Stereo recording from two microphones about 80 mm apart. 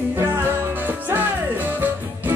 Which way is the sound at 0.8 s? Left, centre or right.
Right.